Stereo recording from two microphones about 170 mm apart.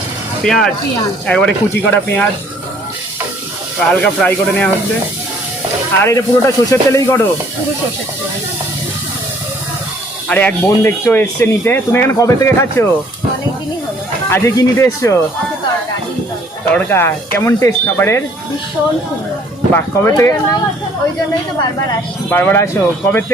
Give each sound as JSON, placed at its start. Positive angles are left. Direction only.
{"t": 0.4, "sound": "speech", "side_deg": 5}
{"t": 3.8, "sound": "speech", "side_deg": 10}
{"t": 6.0, "sound": "speech", "side_deg": 20}
{"t": 10.2, "sound": "speech", "side_deg": 10}
{"t": 14.3, "sound": "speech", "side_deg": 15}
{"t": 16.7, "sound": "speech", "side_deg": 15}
{"t": 19.7, "sound": "speech", "side_deg": 20}
{"t": 22.3, "sound": "speech", "side_deg": 10}